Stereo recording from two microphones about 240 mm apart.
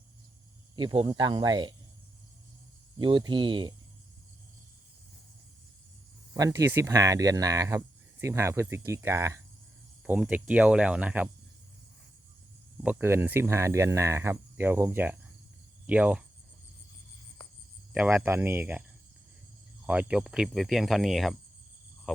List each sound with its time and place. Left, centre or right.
0.8 s speech: centre
3.0 s speech: centre
6.3 s speech: centre
12.8 s speech: centre
17.9 s speech: centre
19.9 s speech: centre